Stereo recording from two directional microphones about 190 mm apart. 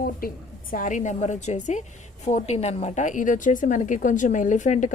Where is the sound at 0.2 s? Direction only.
50° left (ahead or behind).